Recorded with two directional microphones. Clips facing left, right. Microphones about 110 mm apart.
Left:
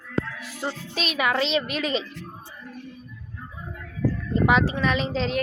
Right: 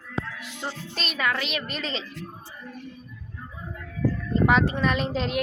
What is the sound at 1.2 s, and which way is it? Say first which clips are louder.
Speech: left 5 dB; 25° left (ahead or behind).